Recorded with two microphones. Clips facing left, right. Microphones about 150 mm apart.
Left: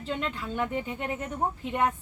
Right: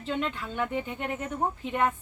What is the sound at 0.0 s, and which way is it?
A woman's voice, centre (ahead or behind).